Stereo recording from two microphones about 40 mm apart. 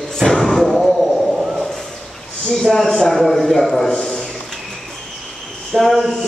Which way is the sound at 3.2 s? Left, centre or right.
Centre.